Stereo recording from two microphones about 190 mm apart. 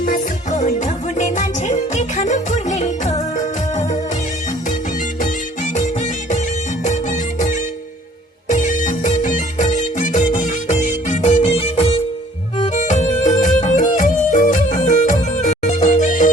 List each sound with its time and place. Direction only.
0.0 s music: 40° left (ahead or behind)
5.7 s music: 40° left (ahead or behind)